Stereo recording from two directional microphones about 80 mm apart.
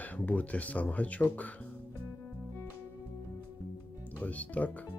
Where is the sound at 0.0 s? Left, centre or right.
Left.